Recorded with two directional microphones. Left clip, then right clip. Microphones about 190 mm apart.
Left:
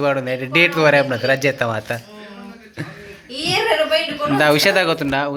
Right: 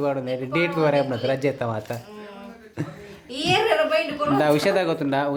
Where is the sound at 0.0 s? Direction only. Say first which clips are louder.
Left 6 dB; centre (ahead or behind).